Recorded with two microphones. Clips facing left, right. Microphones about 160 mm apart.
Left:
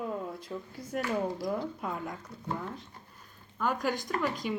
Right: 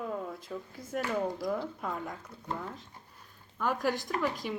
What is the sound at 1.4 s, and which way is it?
Speech, 5° left (ahead or behind).